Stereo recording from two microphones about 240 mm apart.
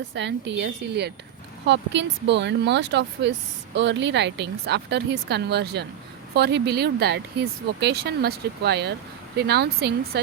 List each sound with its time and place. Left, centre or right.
0.1 s speech: right